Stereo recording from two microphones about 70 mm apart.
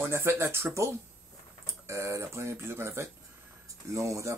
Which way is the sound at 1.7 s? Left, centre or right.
Right.